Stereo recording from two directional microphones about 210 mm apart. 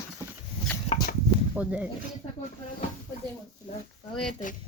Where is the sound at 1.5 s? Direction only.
5° right (ahead or behind).